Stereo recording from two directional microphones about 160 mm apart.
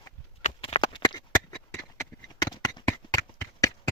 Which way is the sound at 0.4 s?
35° left (ahead or behind).